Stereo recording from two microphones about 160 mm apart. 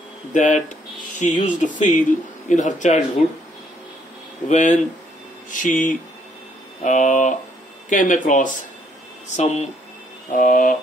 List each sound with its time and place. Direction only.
0.3 s speech: 50° left (ahead or behind)
4.5 s speech: 50° left (ahead or behind)